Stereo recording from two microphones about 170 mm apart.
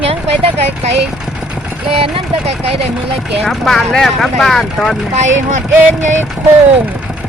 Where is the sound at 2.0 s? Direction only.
35° right (ahead or behind).